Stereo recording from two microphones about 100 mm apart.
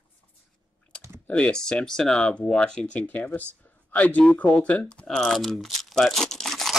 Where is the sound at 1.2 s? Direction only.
10° left (ahead or behind).